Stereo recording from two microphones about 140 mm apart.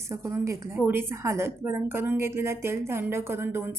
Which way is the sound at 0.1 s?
20° right (ahead or behind).